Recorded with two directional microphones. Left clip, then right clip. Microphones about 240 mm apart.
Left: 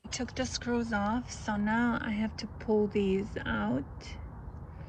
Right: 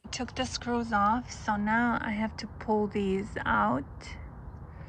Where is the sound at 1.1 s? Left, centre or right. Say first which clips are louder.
Right 4 dB; centre.